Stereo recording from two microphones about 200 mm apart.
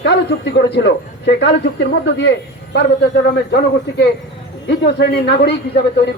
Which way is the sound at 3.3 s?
55° left (ahead or behind).